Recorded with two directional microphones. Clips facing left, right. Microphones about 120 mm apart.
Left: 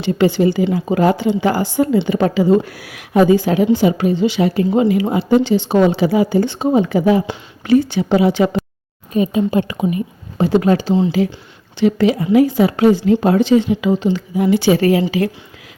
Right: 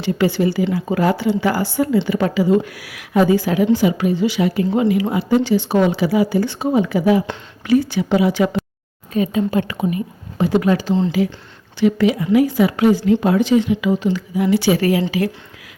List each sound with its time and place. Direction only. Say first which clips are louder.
0.0 s a woman's voice: left 3 dB; 20° left (ahead or behind)